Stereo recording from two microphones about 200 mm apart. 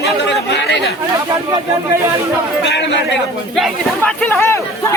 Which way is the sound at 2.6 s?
60° left (ahead or behind).